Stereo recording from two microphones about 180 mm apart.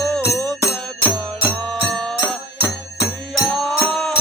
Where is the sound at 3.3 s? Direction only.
5° left (ahead or behind).